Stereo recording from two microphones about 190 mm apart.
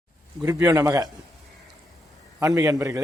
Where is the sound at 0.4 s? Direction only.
15° right (ahead or behind).